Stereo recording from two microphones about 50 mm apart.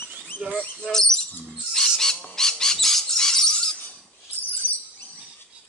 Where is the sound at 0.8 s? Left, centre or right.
Centre.